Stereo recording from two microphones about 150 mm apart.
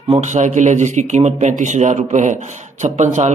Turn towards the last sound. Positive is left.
turn(degrees=-55)  # may be behind; listen again after turning